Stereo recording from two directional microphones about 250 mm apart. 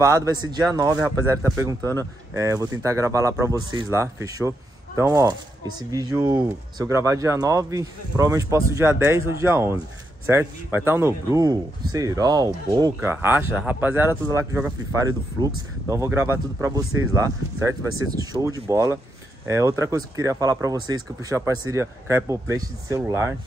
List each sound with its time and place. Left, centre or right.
0.0 s speech: centre